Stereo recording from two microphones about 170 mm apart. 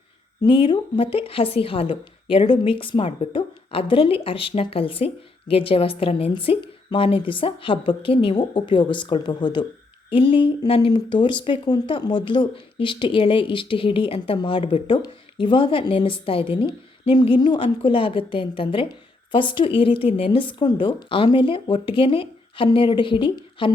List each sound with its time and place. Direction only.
0.4 s speech: 30° left (ahead or behind)